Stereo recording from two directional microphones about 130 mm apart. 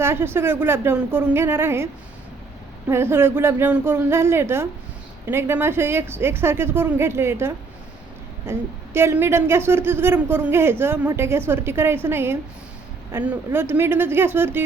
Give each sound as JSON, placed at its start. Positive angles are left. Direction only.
{"t": 0.0, "sound": "a woman's voice", "side_deg": -20}